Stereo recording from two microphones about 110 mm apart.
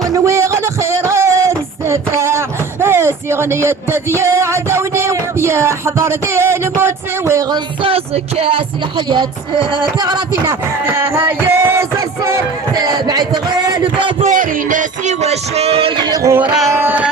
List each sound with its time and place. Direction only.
0.0 s a sound: 30° right (ahead or behind)
2.8 s music: 20° right (ahead or behind)
7.5 s music: 55° right (ahead or behind)
9.0 s speech: 45° right (ahead or behind)
10.5 s music: 25° right (ahead or behind)
12.7 s a sound: 35° right (ahead or behind)
15.0 s a sound: 80° right; by 16.0 s 65° right (ahead or behind)
16.0 s music: 30° right (ahead or behind)
16.6 s music: 20° right (ahead or behind)